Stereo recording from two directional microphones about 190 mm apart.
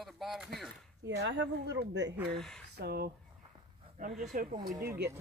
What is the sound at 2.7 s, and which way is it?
Speech, 55° right (ahead or behind).